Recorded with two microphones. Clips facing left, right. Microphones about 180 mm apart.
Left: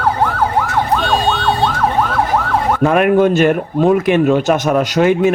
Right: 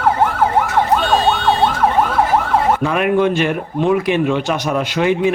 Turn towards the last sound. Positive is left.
turn(degrees=45)  # may be behind; listen again after turning